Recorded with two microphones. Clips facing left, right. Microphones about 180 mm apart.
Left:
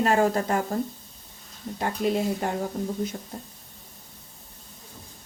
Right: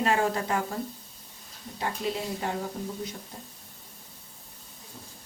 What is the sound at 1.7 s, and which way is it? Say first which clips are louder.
Speech: left 6 dB; 50° left (ahead or behind).